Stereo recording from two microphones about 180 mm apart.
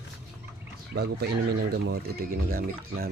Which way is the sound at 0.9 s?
65° right (ahead or behind).